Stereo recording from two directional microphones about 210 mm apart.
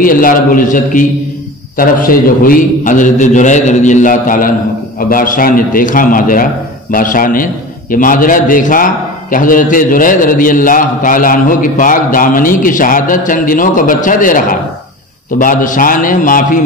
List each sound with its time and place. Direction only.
0.0 s a man's voice: 40° left (ahead or behind)